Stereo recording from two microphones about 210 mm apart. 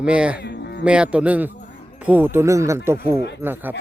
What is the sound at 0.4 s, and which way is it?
Music, 55° left (ahead or behind).